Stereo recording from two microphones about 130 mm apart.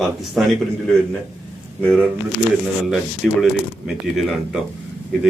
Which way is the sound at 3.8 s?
5° right (ahead or behind).